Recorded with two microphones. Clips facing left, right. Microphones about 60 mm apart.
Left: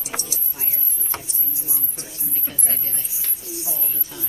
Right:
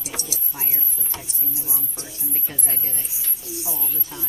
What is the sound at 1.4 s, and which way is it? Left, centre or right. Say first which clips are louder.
Speech: right 2 dB; right.